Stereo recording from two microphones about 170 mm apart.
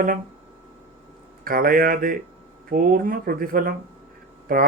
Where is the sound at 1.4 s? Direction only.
55° right (ahead or behind).